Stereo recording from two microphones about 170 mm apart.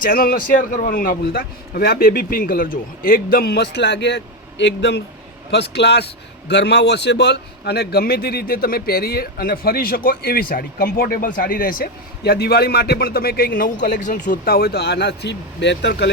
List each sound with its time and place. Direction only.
0.0 s a man's voice: 60° left (ahead or behind); by 16.0 s 90° left